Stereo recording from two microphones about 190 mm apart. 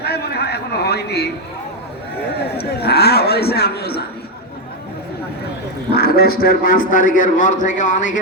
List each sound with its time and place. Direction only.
0.0 s a sound: 60° left (ahead or behind)
2.6 s a man's voice: 55° left (ahead or behind)
5.9 s a man's voice: 55° left (ahead or behind)